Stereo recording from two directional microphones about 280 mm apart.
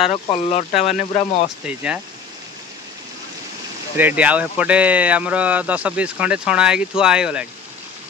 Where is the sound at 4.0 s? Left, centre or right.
Centre.